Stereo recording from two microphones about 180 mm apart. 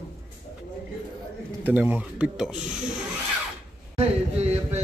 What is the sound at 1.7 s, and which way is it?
Speech, 10° right (ahead or behind).